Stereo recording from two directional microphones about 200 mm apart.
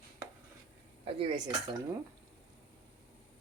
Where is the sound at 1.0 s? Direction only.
25° right (ahead or behind).